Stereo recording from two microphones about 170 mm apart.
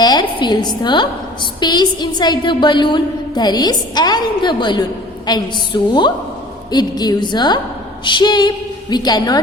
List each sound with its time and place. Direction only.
0.0 s a woman's voice: 25° left (ahead or behind)